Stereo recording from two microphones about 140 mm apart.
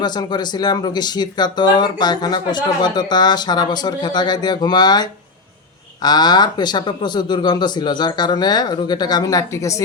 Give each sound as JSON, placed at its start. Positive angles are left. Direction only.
{"t": 0.0, "sound": "speech", "side_deg": 30}